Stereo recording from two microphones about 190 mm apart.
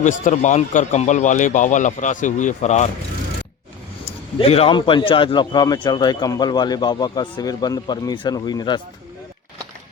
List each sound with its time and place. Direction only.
0.0 s a man's voice: 40° left (ahead or behind)
4.4 s a man's voice: 30° left (ahead or behind)